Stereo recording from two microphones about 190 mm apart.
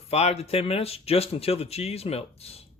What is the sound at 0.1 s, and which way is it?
Speech, 35° left (ahead or behind).